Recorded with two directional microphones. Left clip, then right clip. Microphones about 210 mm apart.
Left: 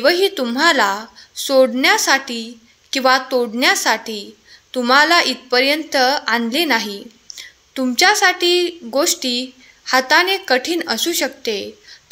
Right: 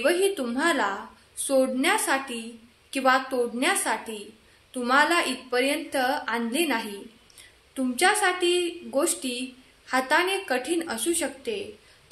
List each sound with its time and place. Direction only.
0.0 s a woman's voice: 40° left (ahead or behind)